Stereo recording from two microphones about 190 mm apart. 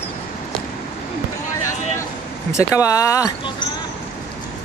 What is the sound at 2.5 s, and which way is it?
Speech, 15° left (ahead or behind).